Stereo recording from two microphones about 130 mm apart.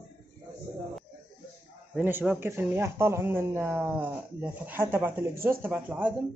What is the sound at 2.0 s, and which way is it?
Speech, 15° right (ahead or behind).